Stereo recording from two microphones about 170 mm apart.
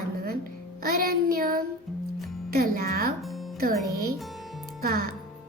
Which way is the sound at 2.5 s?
55° right (ahead or behind).